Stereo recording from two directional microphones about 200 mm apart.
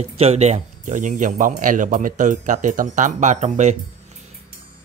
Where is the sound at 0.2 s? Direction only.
35° right (ahead or behind).